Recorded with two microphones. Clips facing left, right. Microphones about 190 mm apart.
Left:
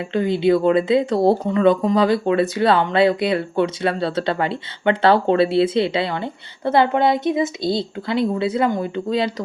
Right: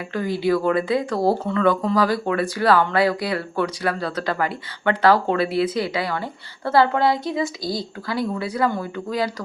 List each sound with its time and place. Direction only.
0.1 s speech: 25° left (ahead or behind)